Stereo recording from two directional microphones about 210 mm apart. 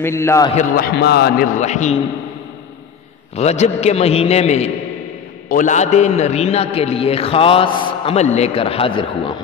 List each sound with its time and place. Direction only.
0.0 s a man's voice: 10° left (ahead or behind)
0.6 s a man's voice: 45° left (ahead or behind)
3.3 s a man's voice: 30° left (ahead or behind)